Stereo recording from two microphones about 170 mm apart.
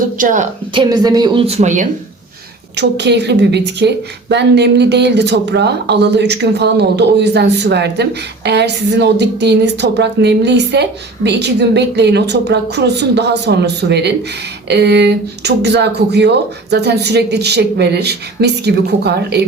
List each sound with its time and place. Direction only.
0.2 s a woman's voice: 50° right (ahead or behind)
0.7 s speech: 25° right (ahead or behind); by 1.9 s 45° right (ahead or behind)
2.7 s a woman's voice: 85° right